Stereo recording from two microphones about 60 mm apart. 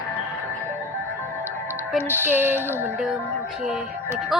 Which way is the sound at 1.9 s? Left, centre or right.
Right.